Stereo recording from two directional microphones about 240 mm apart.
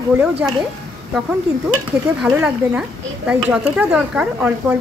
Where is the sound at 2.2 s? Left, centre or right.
Centre.